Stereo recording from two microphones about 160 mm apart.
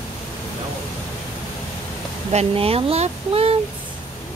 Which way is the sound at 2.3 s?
40° right (ahead or behind).